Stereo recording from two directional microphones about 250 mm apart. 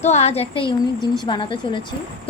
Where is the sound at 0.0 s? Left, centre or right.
Left.